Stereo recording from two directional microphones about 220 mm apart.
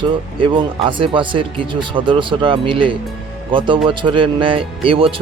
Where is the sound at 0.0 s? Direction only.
25° right (ahead or behind).